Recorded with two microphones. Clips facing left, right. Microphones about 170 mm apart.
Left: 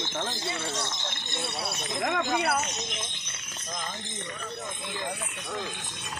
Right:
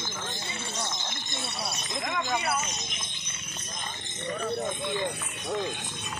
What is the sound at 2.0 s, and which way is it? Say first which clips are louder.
Speech: left 3 dB; 60° left (ahead or behind).